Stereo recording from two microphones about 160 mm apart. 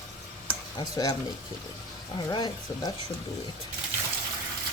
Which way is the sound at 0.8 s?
25° left (ahead or behind).